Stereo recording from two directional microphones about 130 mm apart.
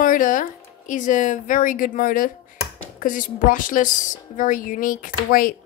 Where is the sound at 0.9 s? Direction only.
75° left (ahead or behind).